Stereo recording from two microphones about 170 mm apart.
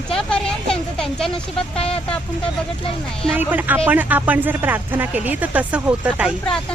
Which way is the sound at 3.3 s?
10° right (ahead or behind).